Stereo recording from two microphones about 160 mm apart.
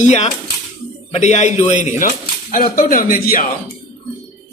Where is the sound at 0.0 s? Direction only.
45° left (ahead or behind); by 3.4 s 65° left (ahead or behind).